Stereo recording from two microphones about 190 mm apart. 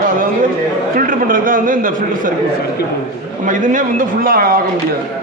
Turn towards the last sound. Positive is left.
turn(degrees=-50)  # may be behind; listen again after turning